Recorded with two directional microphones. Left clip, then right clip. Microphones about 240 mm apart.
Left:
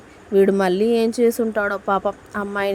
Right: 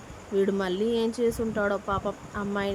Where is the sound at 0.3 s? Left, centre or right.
Left.